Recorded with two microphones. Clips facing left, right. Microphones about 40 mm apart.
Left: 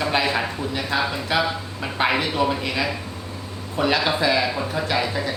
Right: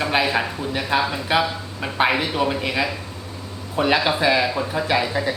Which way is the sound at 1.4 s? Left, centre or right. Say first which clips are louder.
Even; centre.